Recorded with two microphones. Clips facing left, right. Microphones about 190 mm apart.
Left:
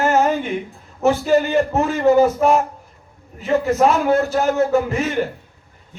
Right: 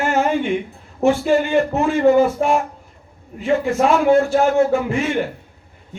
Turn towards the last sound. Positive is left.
turn(degrees=40)  # may be behind; listen again after turning